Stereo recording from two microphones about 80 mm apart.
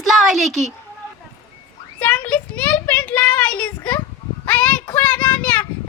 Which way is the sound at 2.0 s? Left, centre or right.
Centre.